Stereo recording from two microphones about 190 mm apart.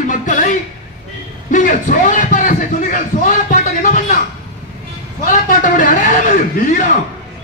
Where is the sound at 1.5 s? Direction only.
45° left (ahead or behind).